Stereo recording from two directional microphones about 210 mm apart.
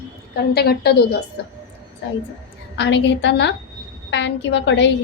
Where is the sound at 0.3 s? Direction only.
50° left (ahead or behind).